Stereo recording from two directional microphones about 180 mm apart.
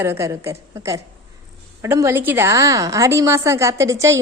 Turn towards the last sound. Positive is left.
turn(degrees=-15)  # may be behind; listen again after turning